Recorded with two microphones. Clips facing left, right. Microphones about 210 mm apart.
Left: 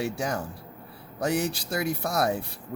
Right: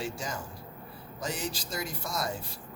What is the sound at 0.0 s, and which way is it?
Speech, 65° left (ahead or behind).